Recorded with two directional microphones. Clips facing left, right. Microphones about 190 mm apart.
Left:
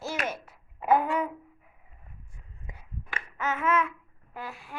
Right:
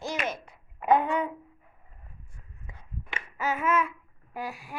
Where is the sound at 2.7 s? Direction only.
20° left (ahead or behind).